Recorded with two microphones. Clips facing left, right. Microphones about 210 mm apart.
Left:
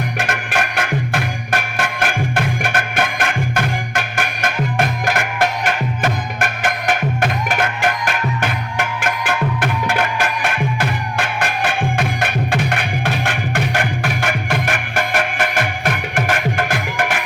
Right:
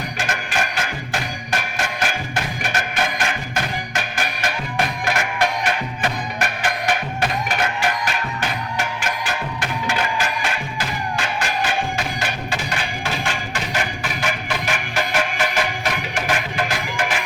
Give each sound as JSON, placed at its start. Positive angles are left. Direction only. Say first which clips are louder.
{"t": 0.2, "sound": "music", "louder": "left 1 dB", "side_deg": 60}